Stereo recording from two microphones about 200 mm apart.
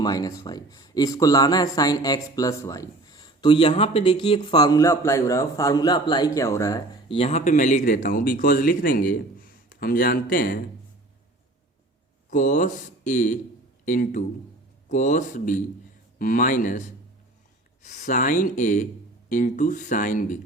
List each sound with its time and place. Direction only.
0.0 s speech: 20° left (ahead or behind)
7.2 s speech: 30° left (ahead or behind)
12.3 s speech: 40° left (ahead or behind)